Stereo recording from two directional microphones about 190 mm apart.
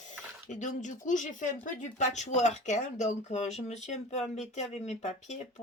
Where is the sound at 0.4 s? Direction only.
40° left (ahead or behind).